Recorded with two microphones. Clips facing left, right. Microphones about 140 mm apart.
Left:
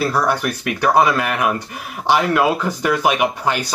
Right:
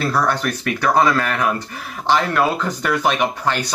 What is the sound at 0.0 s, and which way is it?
Speech, 10° left (ahead or behind).